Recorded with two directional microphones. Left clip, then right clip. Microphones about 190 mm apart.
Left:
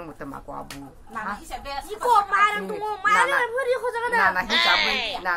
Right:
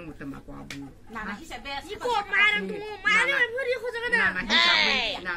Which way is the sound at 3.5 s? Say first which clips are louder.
Left 4 dB; 30° left (ahead or behind).